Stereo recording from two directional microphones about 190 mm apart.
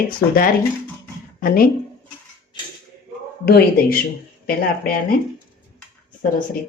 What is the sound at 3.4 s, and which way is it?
Speech, 55° left (ahead or behind).